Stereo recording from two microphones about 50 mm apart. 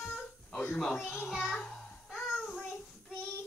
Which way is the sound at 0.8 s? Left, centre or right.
Centre.